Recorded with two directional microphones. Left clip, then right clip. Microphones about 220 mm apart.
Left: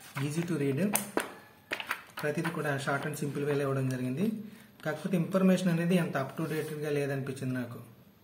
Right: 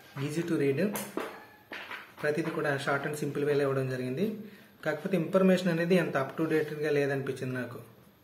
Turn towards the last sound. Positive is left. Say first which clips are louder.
# right 3 dB
turn(degrees=15)  # may be behind; listen again after turning